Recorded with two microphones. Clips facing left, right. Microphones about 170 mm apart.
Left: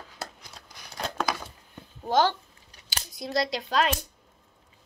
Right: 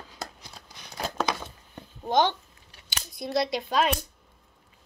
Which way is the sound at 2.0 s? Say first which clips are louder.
Even; 5° left (ahead or behind).